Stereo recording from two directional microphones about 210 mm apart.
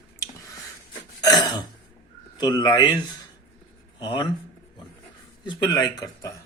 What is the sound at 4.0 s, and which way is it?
Speech, 20° left (ahead or behind).